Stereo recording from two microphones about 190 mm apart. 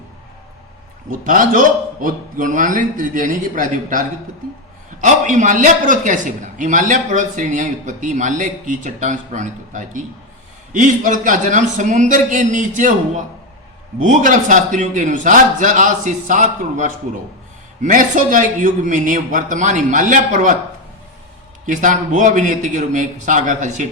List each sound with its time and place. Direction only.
1.2 s a man's voice: 45° right (ahead or behind)
21.7 s a man's voice: 40° right (ahead or behind)